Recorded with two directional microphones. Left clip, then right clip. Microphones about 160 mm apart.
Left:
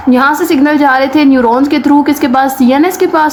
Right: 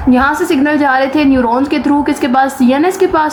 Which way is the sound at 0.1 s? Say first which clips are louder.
Left 2 dB; 30° left (ahead or behind).